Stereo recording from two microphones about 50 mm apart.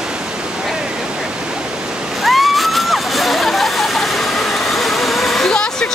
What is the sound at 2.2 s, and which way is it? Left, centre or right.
Splash, centre.